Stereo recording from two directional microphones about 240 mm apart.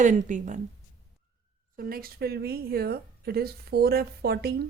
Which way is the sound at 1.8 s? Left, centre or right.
Right.